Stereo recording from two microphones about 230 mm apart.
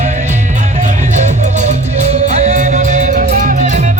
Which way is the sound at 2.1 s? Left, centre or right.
Right.